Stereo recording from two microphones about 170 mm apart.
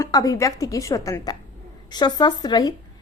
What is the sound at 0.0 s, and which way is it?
A woman's voice, 20° left (ahead or behind).